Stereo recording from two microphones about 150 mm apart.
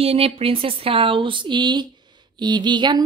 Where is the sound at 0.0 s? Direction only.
40° right (ahead or behind).